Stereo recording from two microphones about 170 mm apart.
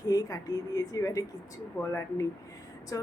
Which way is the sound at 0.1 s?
20° left (ahead or behind).